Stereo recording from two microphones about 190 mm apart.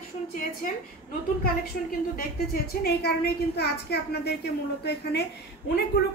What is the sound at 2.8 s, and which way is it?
A woman's voice, 55° left (ahead or behind).